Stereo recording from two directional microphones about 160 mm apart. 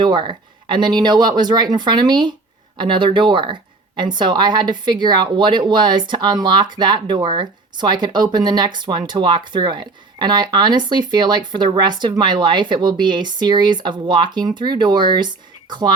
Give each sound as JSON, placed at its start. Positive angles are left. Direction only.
{"t": 0.0, "sound": "a woman's voice", "side_deg": -30}